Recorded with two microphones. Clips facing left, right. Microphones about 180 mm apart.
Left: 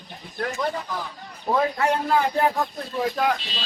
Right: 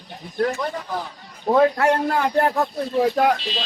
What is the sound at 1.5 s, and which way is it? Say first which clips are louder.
A man's voice: right 5 dB; 60° right (ahead or behind).